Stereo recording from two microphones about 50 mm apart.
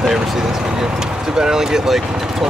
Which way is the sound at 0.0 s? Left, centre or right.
Centre.